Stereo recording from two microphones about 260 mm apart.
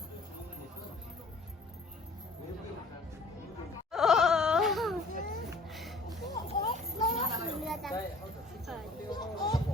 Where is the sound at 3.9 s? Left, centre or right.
Centre.